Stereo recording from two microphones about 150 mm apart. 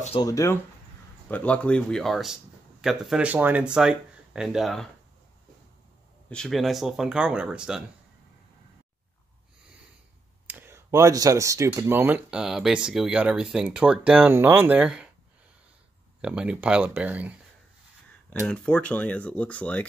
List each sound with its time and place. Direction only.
0.2 s speech: 20° left (ahead or behind)
1.3 s speech: 10° left (ahead or behind)
6.2 s speech: 5° left (ahead or behind)
10.4 s speech: 15° right (ahead or behind)
16.2 s speech: 5° right (ahead or behind)
18.5 s speech: 10° left (ahead or behind)